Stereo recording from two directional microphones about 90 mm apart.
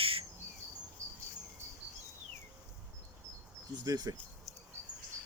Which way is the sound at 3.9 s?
50° right (ahead or behind).